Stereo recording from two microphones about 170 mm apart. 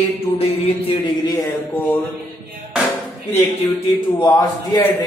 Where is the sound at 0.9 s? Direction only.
20° left (ahead or behind).